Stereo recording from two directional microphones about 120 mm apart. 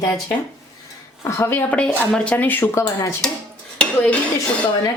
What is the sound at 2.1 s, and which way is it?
Speech, 10° left (ahead or behind).